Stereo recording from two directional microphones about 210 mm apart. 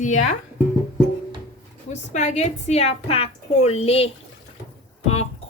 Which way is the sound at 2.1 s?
35° left (ahead or behind).